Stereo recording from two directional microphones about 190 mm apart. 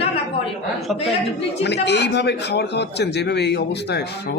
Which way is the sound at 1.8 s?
65° left (ahead or behind).